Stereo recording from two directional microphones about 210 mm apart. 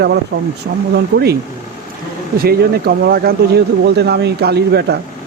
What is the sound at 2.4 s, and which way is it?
Speech, 50° right (ahead or behind).